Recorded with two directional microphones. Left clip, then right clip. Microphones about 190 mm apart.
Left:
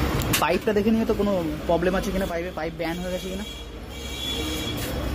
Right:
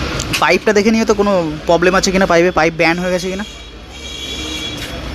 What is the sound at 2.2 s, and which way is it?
Speech, 30° right (ahead or behind).